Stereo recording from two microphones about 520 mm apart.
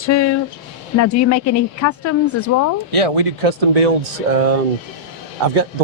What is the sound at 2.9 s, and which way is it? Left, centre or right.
Speech, right.